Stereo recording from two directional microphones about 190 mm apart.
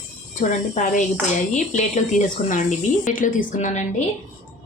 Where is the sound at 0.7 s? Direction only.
40° left (ahead or behind).